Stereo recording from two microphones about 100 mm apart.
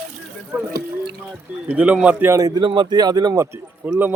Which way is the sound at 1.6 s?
15° right (ahead or behind).